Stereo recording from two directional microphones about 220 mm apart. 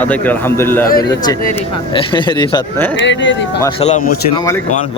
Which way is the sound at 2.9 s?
55° left (ahead or behind).